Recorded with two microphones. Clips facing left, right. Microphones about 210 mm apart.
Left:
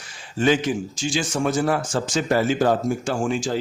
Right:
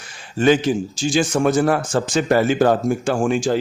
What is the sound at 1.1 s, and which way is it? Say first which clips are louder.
A man's voice: right 6 dB; 55° right (ahead or behind).